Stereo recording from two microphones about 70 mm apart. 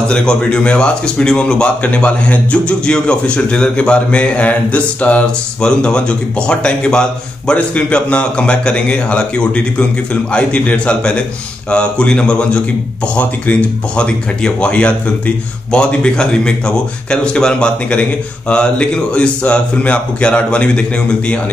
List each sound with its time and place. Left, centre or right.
0.1 s speech: centre